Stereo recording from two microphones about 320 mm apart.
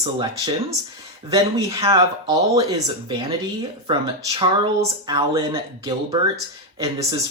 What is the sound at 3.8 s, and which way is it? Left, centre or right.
Speech, centre.